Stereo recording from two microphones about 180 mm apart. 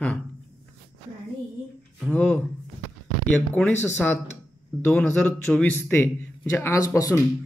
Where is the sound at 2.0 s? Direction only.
10° left (ahead or behind).